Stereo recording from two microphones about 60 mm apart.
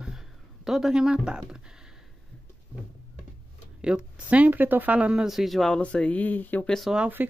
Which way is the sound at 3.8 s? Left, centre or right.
Centre.